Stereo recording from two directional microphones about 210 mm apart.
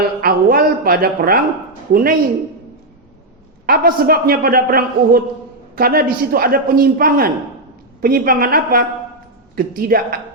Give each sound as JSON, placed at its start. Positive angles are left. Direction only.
{"t": 0.2, "sound": "a woman's voice", "side_deg": -45}
{"t": 3.7, "sound": "a man's voice", "side_deg": -45}